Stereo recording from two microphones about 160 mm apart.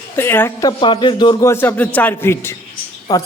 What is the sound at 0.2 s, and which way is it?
Speech, 15° left (ahead or behind).